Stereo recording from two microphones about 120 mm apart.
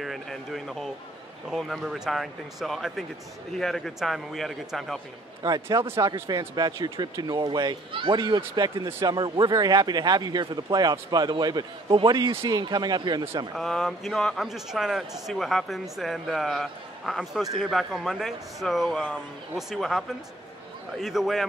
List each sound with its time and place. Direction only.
0.0 s a man's voice: centre (ahead or behind)
5.4 s speech: 30° right (ahead or behind)
13.6 s a man's voice: centre (ahead or behind)